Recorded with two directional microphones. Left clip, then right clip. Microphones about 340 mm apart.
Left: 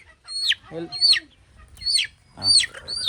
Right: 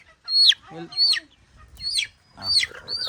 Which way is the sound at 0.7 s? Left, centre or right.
Centre.